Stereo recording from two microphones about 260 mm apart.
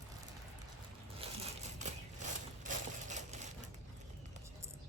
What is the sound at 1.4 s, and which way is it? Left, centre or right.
Crushing, right.